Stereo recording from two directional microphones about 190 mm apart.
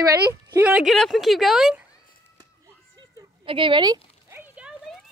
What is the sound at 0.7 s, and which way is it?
Speech, 5° right (ahead or behind).